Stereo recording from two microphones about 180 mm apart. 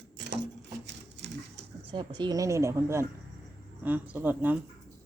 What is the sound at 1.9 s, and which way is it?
A woman's voice, 25° right (ahead or behind).